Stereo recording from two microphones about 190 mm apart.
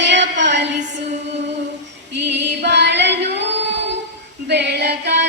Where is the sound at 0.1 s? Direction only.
70° right (ahead or behind).